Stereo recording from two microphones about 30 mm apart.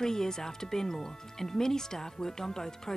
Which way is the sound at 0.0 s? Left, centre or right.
Centre.